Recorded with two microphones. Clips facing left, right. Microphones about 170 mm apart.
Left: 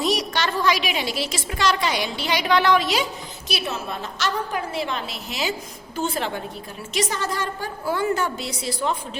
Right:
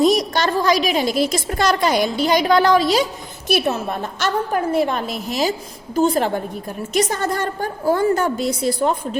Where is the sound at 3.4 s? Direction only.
55° right (ahead or behind).